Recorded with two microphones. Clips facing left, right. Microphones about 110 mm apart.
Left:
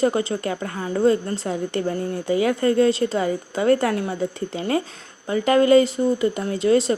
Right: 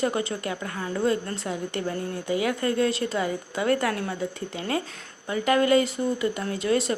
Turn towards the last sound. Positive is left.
turn(degrees=30)  # may be behind; listen again after turning